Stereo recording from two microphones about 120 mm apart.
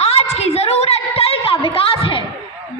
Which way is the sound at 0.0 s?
65° left (ahead or behind).